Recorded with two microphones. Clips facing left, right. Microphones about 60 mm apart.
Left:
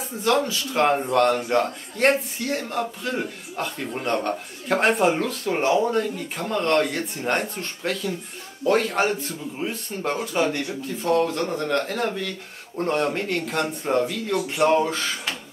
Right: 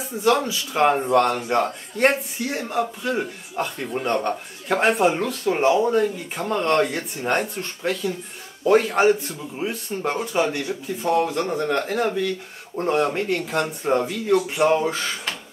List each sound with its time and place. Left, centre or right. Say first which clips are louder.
0.5 s speech: right 1 dB; centre
11.0 s speech: even; centre